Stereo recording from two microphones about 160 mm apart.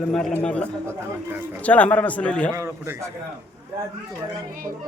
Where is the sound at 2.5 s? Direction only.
20° right (ahead or behind).